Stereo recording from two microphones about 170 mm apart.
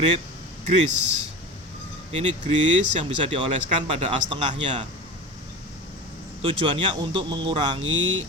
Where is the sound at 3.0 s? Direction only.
30° right (ahead or behind).